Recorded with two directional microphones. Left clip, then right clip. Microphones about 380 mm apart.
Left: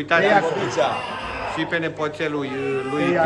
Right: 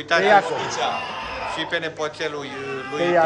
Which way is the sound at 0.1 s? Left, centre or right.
Centre.